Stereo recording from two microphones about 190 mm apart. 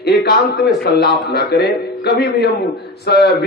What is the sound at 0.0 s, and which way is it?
A man's voice, 55° left (ahead or behind).